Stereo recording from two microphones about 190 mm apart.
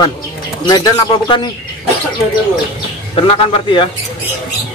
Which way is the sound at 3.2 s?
25° left (ahead or behind).